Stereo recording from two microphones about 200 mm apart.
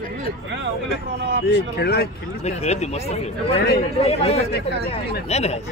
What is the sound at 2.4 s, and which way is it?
Speech, 35° left (ahead or behind).